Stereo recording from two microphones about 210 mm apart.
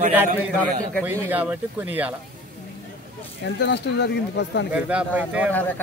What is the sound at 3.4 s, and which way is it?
Speech, 55° left (ahead or behind).